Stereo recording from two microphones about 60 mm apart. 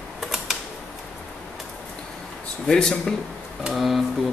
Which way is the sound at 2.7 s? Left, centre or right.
Centre.